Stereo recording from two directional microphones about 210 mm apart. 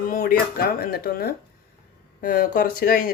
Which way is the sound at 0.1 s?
45° left (ahead or behind).